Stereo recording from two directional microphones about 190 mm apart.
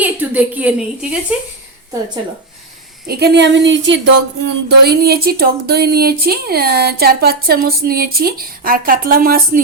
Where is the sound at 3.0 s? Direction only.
60° right (ahead or behind).